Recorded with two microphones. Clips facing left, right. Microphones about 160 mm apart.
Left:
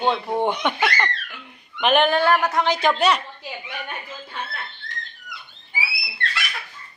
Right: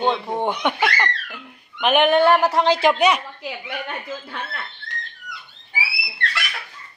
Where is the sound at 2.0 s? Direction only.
20° right (ahead or behind).